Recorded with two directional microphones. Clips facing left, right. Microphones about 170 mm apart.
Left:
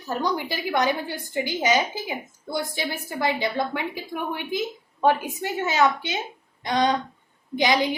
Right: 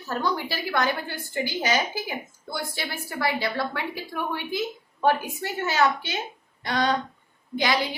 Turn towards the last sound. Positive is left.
turn(degrees=20)  # may be behind; listen again after turning